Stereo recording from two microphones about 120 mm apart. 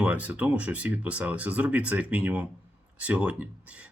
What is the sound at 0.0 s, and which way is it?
A man's voice, 10° right (ahead or behind).